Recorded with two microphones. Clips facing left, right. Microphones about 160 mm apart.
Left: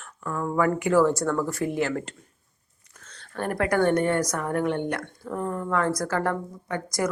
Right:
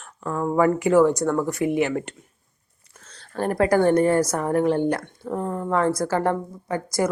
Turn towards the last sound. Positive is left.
turn(degrees=-30)  # may be behind; listen again after turning